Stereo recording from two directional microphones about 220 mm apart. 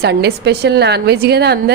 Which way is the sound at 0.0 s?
50° right (ahead or behind).